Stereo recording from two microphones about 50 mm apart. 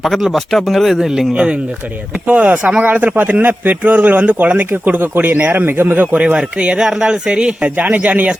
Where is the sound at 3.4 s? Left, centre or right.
Right.